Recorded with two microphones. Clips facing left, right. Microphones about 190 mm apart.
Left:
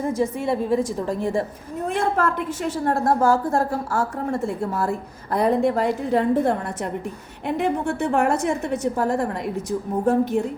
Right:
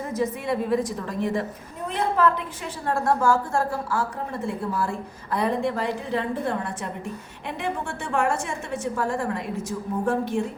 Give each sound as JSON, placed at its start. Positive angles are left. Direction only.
{"t": 0.2, "sound": "a woman's voice", "side_deg": 30}
{"t": 1.9, "sound": "a woman's voice", "side_deg": 50}
{"t": 8.2, "sound": "a woman's voice", "side_deg": 40}